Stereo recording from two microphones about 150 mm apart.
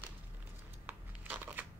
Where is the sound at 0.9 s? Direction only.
10° right (ahead or behind).